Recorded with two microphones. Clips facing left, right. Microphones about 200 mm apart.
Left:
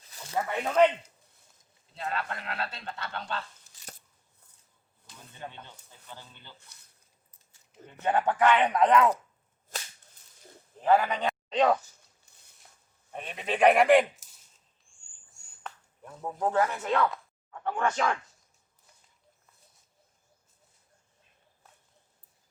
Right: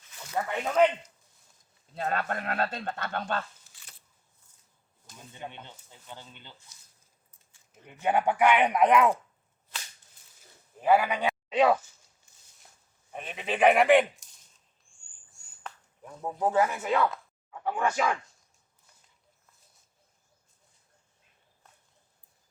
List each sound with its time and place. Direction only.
0.0 s a sound: 35° left (ahead or behind)
0.3 s speech: centre (ahead or behind)
2.0 s speech: 50° right (ahead or behind)
5.3 s speech: 15° right (ahead or behind)
6.7 s speech: 60° left (ahead or behind)
8.0 s speech: 10° right (ahead or behind)
10.8 s speech: 10° right (ahead or behind)
13.1 s speech: centre (ahead or behind)
16.2 s speech: 5° right (ahead or behind)